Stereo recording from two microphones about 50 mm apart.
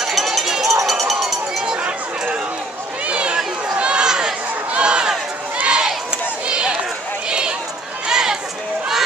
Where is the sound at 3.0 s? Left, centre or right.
Right.